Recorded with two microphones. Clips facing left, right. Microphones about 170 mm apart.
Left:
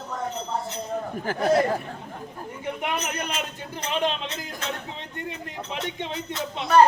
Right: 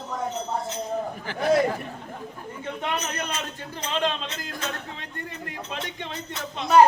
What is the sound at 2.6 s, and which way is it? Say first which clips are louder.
A man's voice: left 1 dB; 15° left (ahead or behind).